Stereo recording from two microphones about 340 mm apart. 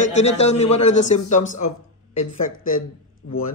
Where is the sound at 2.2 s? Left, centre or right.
Left.